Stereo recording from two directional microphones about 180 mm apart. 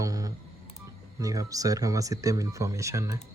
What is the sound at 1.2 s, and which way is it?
Speech, 20° right (ahead or behind).